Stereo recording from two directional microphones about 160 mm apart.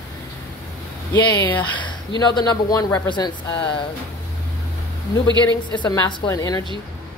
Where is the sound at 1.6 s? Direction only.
30° left (ahead or behind).